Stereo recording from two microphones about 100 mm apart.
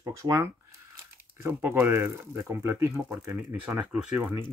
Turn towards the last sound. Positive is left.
turn(degrees=-15)  # may be behind; listen again after turning